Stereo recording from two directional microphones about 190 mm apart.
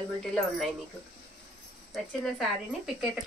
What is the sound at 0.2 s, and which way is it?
Speech, centre (ahead or behind).